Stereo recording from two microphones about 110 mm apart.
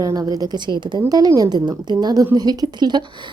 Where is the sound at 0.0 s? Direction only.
35° right (ahead or behind).